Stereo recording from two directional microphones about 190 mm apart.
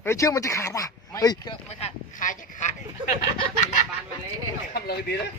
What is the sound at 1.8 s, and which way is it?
Speech, 40° left (ahead or behind).